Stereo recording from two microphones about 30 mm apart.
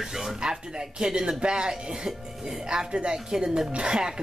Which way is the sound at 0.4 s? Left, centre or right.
Right.